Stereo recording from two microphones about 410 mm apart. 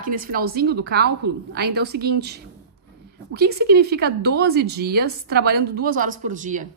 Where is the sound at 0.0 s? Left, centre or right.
Right.